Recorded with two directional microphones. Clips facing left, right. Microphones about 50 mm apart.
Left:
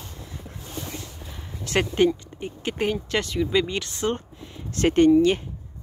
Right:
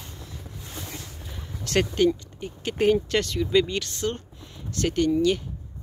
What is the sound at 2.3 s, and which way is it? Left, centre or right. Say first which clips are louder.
Vehicle: left 2 dB; left.